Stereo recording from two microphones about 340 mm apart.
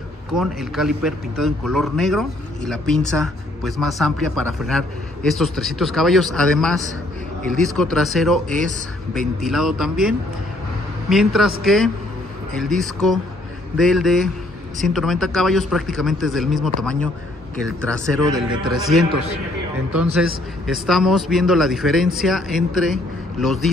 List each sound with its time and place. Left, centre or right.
0.3 s a man's voice: centre
17.8 s a man's voice: centre
20.2 s a man's voice: centre